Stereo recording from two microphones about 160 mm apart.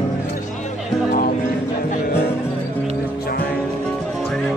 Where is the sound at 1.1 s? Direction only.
65° left (ahead or behind).